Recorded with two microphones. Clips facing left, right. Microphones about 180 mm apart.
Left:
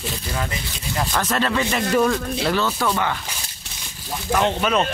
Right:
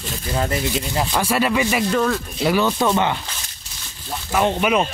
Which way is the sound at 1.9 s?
5° left (ahead or behind).